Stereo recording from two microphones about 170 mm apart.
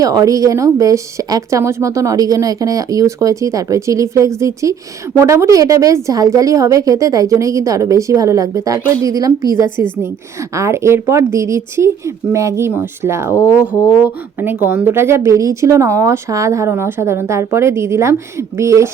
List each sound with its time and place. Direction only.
0.0 s speech: 20° right (ahead or behind)
14.4 s speech: 10° right (ahead or behind)